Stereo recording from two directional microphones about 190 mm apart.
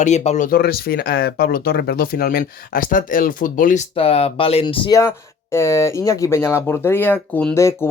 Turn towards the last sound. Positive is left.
turn(degrees=15)  # may be behind; listen again after turning